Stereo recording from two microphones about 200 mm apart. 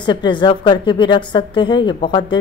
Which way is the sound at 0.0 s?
25° left (ahead or behind).